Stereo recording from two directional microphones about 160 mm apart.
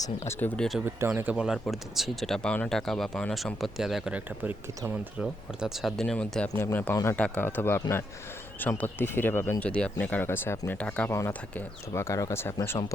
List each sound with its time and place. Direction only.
0.0 s speech: 15° left (ahead or behind)
0.9 s speech: 15° right (ahead or behind); by 12.8 s 15° left (ahead or behind)